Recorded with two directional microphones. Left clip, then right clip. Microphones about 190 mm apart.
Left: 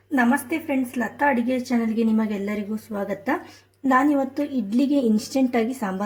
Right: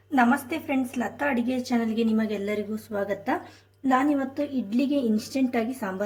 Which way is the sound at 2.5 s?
35° left (ahead or behind).